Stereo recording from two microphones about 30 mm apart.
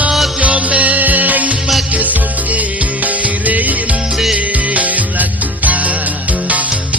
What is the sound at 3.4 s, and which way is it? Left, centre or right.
Music, right.